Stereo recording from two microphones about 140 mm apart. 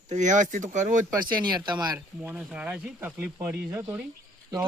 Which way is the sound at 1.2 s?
30° right (ahead or behind).